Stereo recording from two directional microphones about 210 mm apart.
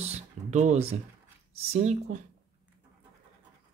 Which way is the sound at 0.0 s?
30° right (ahead or behind).